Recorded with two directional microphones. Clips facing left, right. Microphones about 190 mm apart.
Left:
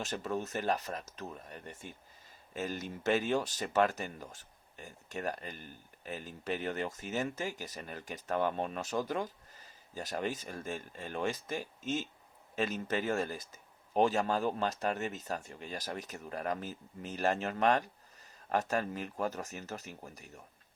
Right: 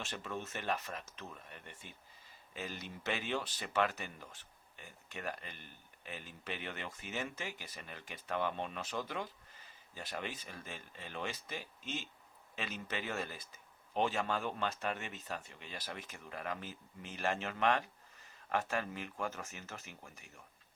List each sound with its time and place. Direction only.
0.0 s speech: 40° left (ahead or behind)